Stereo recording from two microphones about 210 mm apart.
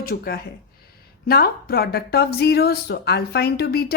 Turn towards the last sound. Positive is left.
turn(degrees=50)  # may be behind; listen again after turning